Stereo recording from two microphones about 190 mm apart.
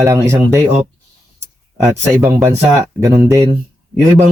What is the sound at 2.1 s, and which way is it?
Speech, 15° right (ahead or behind).